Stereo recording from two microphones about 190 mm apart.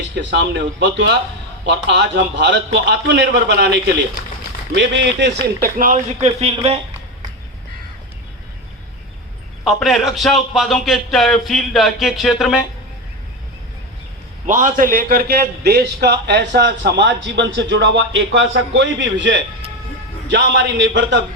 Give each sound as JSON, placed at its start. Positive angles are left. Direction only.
{"t": 0.2, "sound": "a man's voice", "side_deg": -70}
{"t": 6.1, "sound": "speech", "side_deg": -35}
{"t": 9.6, "sound": "speech", "side_deg": 0}
{"t": 14.4, "sound": "a man's voice", "side_deg": -40}